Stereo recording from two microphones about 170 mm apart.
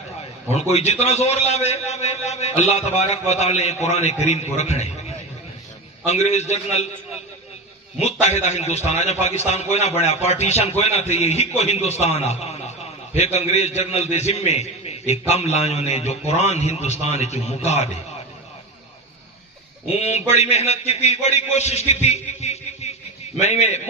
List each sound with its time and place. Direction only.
0.5 s a man's voice: 40° left (ahead or behind)
6.0 s a man's voice: 40° left (ahead or behind)
8.0 s a man's voice: 40° left (ahead or behind)
20.0 s a man's voice: 40° left (ahead or behind)